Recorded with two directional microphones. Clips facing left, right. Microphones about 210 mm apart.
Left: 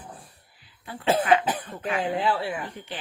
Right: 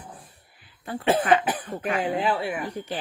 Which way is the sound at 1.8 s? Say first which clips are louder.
Right 1 dB; 20° right (ahead or behind).